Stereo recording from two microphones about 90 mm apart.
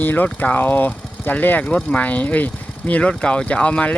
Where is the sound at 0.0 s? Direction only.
20° left (ahead or behind).